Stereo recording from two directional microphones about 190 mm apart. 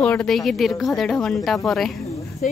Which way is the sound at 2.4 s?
45° left (ahead or behind).